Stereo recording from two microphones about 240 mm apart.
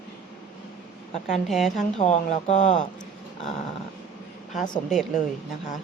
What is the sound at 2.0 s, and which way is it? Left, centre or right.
Speech, left.